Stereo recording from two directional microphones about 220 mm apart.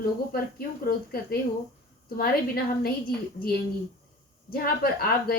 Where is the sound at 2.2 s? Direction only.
45° left (ahead or behind).